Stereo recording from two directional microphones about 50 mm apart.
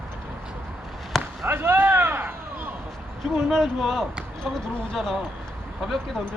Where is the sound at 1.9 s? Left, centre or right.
Right.